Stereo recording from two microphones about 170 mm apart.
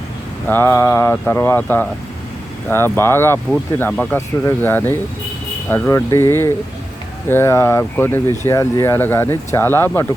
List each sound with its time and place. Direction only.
0.4 s speech: 15° left (ahead or behind)